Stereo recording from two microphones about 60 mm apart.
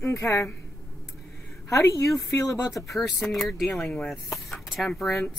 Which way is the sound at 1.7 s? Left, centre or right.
Left.